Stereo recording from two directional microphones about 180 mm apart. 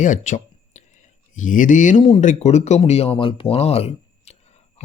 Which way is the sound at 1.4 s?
45° left (ahead or behind).